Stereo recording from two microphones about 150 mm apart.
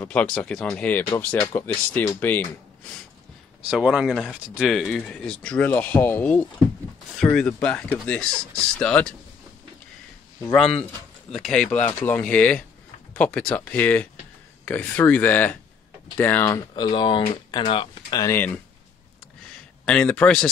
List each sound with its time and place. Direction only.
0.0 s speech: 10° left (ahead or behind)
3.6 s speech: 5° right (ahead or behind)
10.4 s speech: 5° left (ahead or behind); by 18.2 s 35° left (ahead or behind)
18.2 s speech: 15° left (ahead or behind)
19.8 s speech: 10° left (ahead or behind)